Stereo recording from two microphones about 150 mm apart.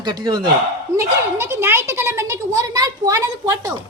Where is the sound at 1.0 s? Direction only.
15° right (ahead or behind).